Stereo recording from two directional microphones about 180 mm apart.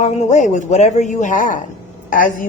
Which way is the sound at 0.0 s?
35° left (ahead or behind).